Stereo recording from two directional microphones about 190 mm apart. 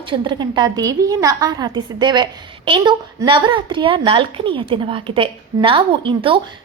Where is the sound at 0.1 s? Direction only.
25° right (ahead or behind).